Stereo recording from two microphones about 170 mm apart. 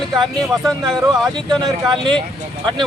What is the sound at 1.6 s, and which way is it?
Speech, 25° right (ahead or behind).